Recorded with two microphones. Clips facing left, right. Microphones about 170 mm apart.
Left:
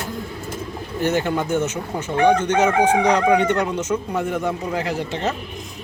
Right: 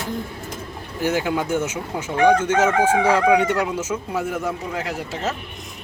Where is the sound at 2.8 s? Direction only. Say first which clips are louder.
Even; 5° right (ahead or behind).